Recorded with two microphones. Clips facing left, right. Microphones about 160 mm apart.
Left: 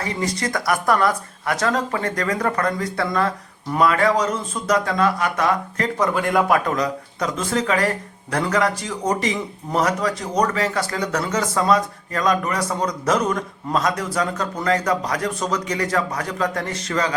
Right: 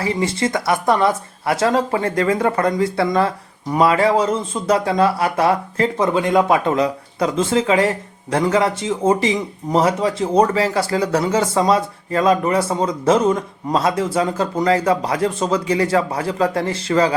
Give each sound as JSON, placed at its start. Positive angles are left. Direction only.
{"t": 0.0, "sound": "speech", "side_deg": -30}